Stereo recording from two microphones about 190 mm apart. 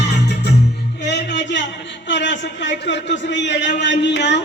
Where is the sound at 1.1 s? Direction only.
70° left (ahead or behind).